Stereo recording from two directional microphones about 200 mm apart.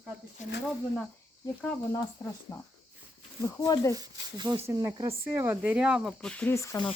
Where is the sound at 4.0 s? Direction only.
20° right (ahead or behind); by 6.9 s 15° left (ahead or behind).